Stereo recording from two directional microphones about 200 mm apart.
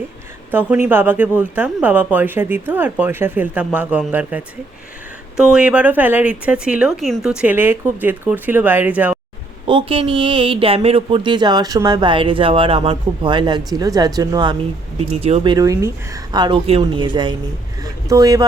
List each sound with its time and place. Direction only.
0.5 s speech: 10° right (ahead or behind)
9.6 s speech: 25° right (ahead or behind)
15.1 s speech: 30° right (ahead or behind)
15.5 s speech: 15° right (ahead or behind)